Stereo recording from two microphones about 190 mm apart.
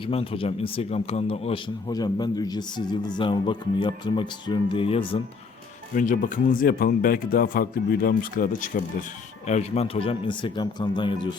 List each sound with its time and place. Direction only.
0.0 s speech: 30° left (ahead or behind)
5.9 s speech: 45° left (ahead or behind); by 11.3 s 25° left (ahead or behind)